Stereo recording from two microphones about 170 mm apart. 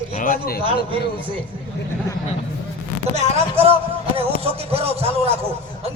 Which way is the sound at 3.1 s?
40° right (ahead or behind).